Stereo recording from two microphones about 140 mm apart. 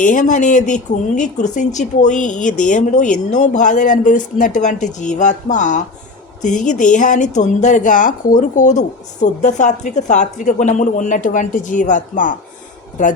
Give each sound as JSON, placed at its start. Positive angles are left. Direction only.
{"t": 0.0, "sound": "speech", "side_deg": 65}